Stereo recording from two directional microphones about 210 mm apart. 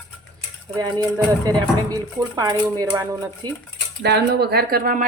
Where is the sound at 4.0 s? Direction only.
50° right (ahead or behind).